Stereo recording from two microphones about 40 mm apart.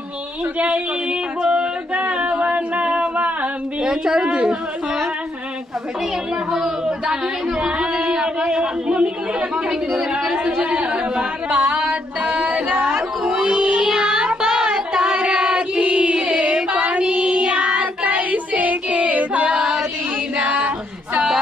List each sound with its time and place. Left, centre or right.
0.6 s speech: right
1.4 s a sound: right
2.0 s singing: right
3.8 s a woman's voice: centre
6.5 s speech: centre
11.4 s female singing: right
12.5 s a sound: right
12.9 s music: right
14.0 s child singing: right
17.1 s child singing: right
19.6 s chant: centre
20.3 s a sound: right